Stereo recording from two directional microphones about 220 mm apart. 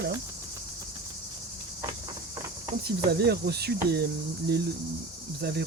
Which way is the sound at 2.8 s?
45° right (ahead or behind).